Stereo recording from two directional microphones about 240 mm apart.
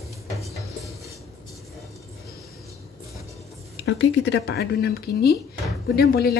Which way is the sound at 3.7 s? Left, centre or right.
Left.